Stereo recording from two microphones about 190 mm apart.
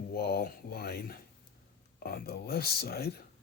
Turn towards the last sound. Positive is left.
turn(degrees=55)  # may be behind; listen again after turning